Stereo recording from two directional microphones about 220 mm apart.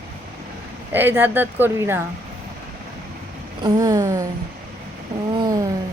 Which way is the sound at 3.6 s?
15° right (ahead or behind).